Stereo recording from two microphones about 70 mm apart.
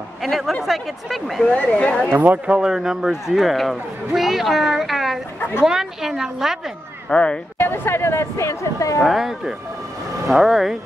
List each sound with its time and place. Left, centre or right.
0.2 s speech: centre
1.4 s speech: centre
2.0 s a woman's voice: right; by 6.6 s centre
7.1 s speech: centre
7.5 s speech: left
9.0 s speech: centre
10.3 s speech: centre